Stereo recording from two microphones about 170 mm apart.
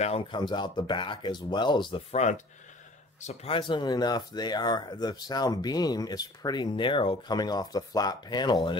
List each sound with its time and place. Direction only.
0.0 s speech: 35° left (ahead or behind)
2.1 s speech: 40° left (ahead or behind); by 8.5 s 25° left (ahead or behind)